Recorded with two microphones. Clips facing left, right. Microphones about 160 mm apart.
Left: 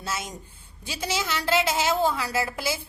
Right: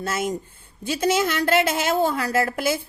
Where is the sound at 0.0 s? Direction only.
50° right (ahead or behind).